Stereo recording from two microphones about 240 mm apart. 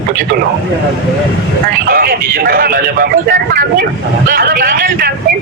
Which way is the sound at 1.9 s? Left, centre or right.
Right.